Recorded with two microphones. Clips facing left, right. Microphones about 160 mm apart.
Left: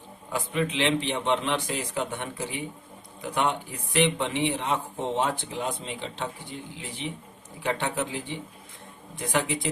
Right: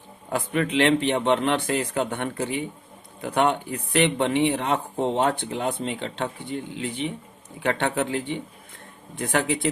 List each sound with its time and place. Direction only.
0.3 s speech: 60° right (ahead or behind)